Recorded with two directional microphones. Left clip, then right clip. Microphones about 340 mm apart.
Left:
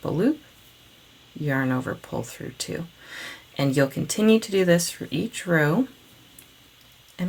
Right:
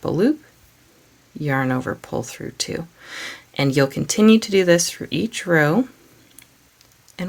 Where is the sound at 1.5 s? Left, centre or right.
Right.